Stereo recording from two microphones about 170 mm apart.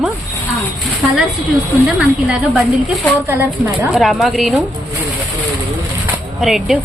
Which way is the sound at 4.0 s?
Centre (ahead or behind).